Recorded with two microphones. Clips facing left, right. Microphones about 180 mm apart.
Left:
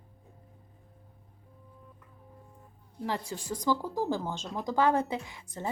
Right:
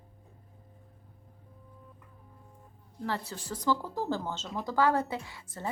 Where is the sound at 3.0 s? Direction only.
15° left (ahead or behind).